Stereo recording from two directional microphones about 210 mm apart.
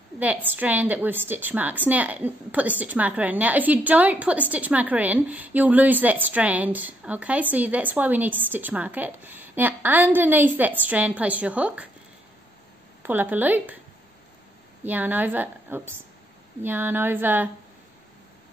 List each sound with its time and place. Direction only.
0.2 s a woman's voice: 10° right (ahead or behind)
13.0 s a woman's voice: 10° right (ahead or behind)
14.9 s a woman's voice: 10° right (ahead or behind)